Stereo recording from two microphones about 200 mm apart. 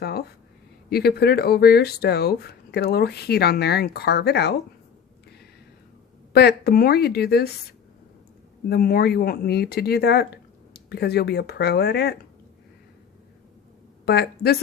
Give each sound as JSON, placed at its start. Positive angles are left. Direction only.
{"t": 0.0, "sound": "speech", "side_deg": 50}
{"t": 6.3, "sound": "speech", "side_deg": 50}
{"t": 8.7, "sound": "speech", "side_deg": 50}
{"t": 14.0, "sound": "speech", "side_deg": 55}